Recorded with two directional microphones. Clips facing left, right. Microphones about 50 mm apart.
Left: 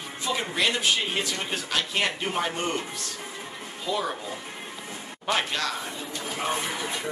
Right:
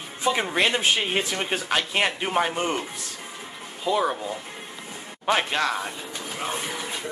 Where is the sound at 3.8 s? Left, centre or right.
Centre.